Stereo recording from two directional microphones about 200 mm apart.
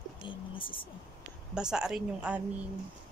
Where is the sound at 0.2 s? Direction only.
25° left (ahead or behind).